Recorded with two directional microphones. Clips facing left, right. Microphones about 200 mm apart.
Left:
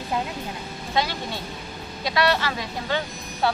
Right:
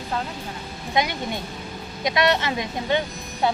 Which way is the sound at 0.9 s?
20° right (ahead or behind).